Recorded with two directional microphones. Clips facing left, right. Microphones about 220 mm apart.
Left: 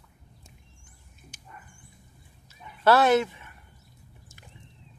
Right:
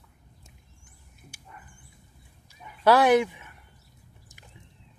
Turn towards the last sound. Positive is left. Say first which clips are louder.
# right 1 dB
turn(degrees=-15)  # may be behind; listen again after turning